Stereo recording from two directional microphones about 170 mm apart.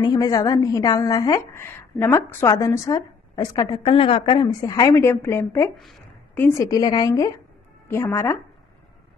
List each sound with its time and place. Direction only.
0.0 s a woman's voice: 20° left (ahead or behind)